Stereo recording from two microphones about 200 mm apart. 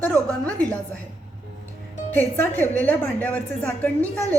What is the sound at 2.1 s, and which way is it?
A woman's voice, 10° left (ahead or behind).